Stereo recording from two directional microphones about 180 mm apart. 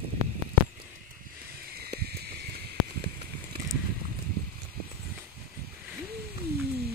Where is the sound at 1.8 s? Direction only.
60° right (ahead or behind).